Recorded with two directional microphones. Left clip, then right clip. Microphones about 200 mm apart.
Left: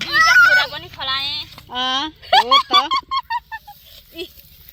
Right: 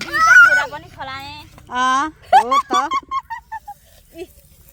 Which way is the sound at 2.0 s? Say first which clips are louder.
Even; 10° right (ahead or behind).